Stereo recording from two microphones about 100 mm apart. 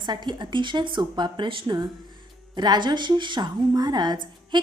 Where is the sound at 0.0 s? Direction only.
45° right (ahead or behind).